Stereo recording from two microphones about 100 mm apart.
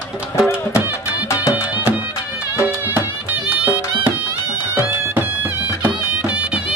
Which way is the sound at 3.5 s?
20° right (ahead or behind).